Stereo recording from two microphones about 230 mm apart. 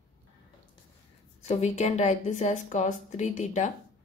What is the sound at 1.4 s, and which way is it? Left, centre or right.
Speech, left.